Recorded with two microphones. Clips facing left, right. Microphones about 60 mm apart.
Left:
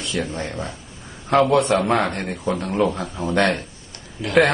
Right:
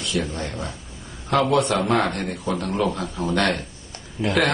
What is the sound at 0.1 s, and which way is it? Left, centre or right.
Speech, left.